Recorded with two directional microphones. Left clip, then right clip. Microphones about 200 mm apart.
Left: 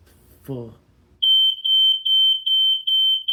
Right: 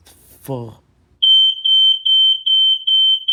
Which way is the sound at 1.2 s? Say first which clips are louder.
Right 5 dB; 20° left (ahead or behind).